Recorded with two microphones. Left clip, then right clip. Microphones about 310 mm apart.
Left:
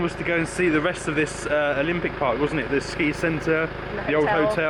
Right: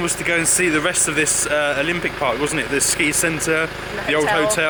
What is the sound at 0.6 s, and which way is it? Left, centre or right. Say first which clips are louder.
Speech: right 4 dB; centre.